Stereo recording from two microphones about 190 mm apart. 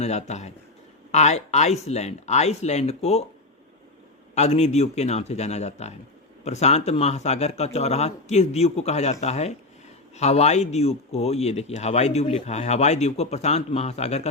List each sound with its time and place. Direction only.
0.0 s speech: 35° left (ahead or behind)
4.4 s speech: 35° left (ahead or behind)